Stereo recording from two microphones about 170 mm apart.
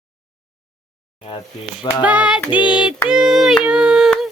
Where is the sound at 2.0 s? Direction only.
5° right (ahead or behind).